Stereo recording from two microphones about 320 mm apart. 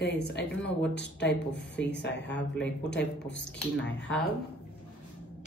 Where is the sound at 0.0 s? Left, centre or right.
Left.